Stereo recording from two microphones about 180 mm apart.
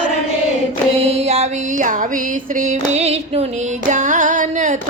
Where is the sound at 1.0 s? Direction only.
35° right (ahead or behind).